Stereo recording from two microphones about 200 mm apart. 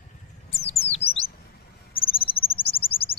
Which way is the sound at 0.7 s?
30° left (ahead or behind).